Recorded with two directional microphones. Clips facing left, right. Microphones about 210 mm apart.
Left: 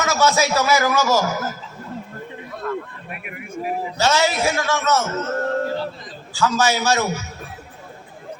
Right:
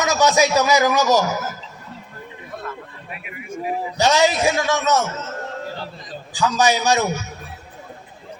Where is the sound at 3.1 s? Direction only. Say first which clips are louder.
Left 1 dB; 55° left (ahead or behind).